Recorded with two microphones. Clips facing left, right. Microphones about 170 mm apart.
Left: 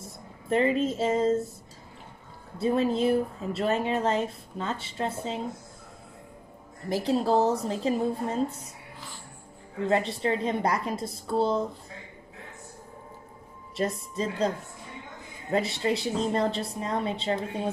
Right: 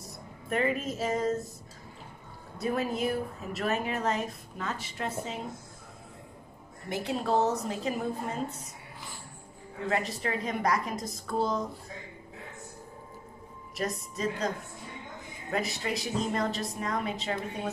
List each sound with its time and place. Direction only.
0.0 s speech: 30° left (ahead or behind)
2.6 s speech: 30° left (ahead or behind)
6.9 s a woman's voice: 30° left (ahead or behind)
9.8 s speech: 30° left (ahead or behind)
13.7 s speech: 30° left (ahead or behind)
15.5 s a woman's voice: 30° left (ahead or behind)